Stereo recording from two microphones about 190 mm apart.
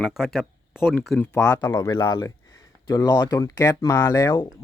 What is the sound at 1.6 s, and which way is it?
Speech, 20° left (ahead or behind).